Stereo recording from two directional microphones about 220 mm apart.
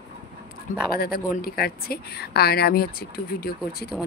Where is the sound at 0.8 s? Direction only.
45° left (ahead or behind).